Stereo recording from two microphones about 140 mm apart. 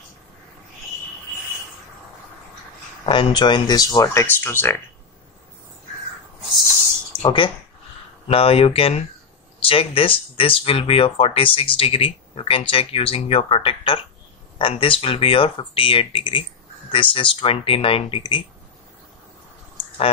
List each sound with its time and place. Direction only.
3.1 s speech: 35° left (ahead or behind); by 4.7 s 15° left (ahead or behind)
7.2 s speech: 35° left (ahead or behind)